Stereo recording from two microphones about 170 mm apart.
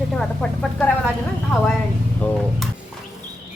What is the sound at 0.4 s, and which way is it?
Speech, 5° left (ahead or behind).